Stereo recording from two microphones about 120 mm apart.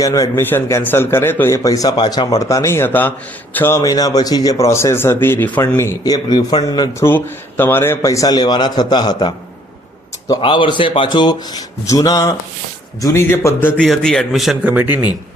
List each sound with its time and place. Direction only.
0.0 s a man's voice: 30° left (ahead or behind)
7.0 s a man's voice: 15° left (ahead or behind); by 9.3 s 40° left (ahead or behind)
10.4 s a man's voice: 45° left (ahead or behind); by 13.8 s 15° left (ahead or behind)
13.8 s a man's voice: 5° left (ahead or behind)
14.6 s speech: 15° right (ahead or behind)